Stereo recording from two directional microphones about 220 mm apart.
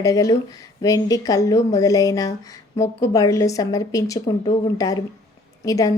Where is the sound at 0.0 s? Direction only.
15° left (ahead or behind).